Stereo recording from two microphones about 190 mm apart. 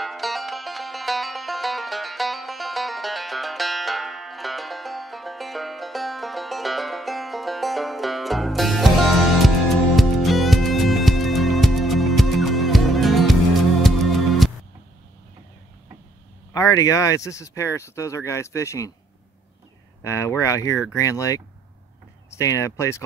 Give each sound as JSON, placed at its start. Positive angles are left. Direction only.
{"t": 0.0, "sound": "music", "side_deg": 0}
{"t": 9.9, "sound": "music", "side_deg": 0}
{"t": 16.5, "sound": "speech", "side_deg": 15}
{"t": 20.0, "sound": "speech", "side_deg": 15}